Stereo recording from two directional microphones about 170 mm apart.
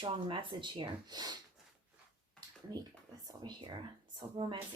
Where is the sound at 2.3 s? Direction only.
25° right (ahead or behind).